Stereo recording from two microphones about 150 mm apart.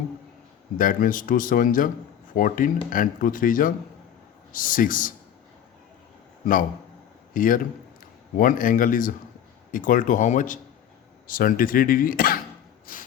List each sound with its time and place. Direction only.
0.8 s speech: 65° left (ahead or behind)
6.4 s a man's voice: 65° left (ahead or behind)
12.8 s a sound: 65° left (ahead or behind)